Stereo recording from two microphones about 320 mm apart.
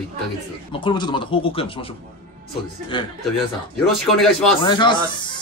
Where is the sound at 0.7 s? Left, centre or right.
Centre.